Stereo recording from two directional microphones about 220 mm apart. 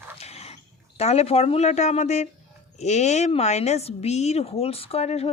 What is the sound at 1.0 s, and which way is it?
Speech, 30° left (ahead or behind).